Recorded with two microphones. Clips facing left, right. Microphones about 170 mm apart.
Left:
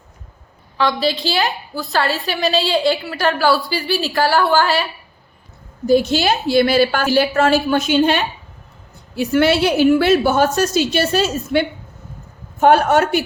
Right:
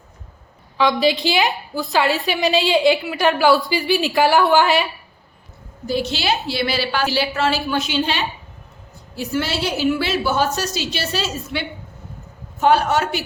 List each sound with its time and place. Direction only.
0.8 s a woman's voice: 15° right (ahead or behind)
5.8 s a woman's voice: 45° left (ahead or behind)
9.1 s a woman's voice: 60° left (ahead or behind)